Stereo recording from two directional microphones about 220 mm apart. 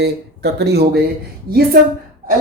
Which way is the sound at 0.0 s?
50° right (ahead or behind).